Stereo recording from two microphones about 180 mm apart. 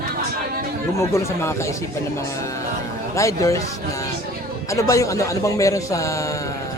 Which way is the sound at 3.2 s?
15° left (ahead or behind).